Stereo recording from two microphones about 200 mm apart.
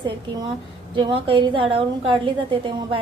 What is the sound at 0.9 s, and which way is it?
A woman's voice, 25° right (ahead or behind).